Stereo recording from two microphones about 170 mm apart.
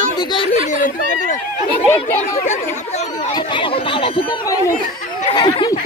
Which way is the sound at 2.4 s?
45° left (ahead or behind).